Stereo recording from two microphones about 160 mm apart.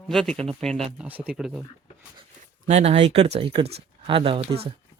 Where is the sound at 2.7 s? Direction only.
40° right (ahead or behind).